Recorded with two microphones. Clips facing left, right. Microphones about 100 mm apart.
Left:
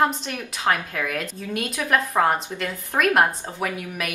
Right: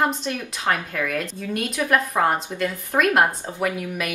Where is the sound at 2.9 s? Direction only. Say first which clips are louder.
Right 1 dB; centre (ahead or behind).